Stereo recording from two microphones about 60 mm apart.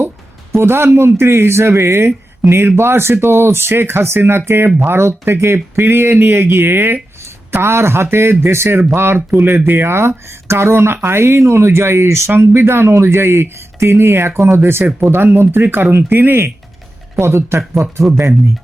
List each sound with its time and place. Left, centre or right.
0.5 s speech: right
17.2 s speech: right